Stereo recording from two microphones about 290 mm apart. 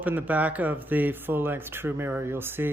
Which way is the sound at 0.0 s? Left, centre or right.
Centre.